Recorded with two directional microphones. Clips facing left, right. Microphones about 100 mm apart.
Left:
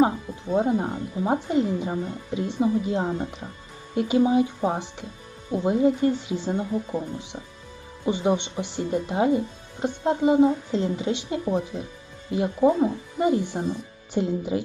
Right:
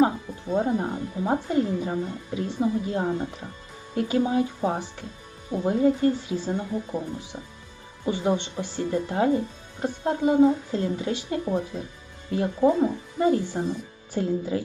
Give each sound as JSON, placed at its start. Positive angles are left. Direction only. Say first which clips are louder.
{"t": 0.5, "sound": "speech", "louder": "left 2 dB", "side_deg": 20}